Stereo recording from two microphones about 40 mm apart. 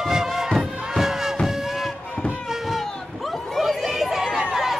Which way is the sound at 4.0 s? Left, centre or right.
Centre.